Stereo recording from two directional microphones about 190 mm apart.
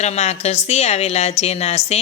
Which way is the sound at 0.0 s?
35° left (ahead or behind).